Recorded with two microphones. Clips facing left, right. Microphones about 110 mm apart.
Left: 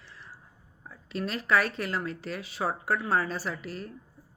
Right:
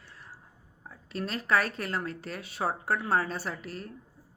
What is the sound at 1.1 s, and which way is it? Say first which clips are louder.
Speech: left 1 dB; 35° right (ahead or behind).